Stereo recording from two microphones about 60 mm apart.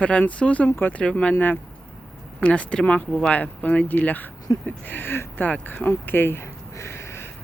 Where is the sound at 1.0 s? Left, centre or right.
Centre.